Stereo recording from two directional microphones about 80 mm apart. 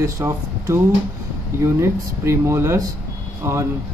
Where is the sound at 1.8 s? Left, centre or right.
Right.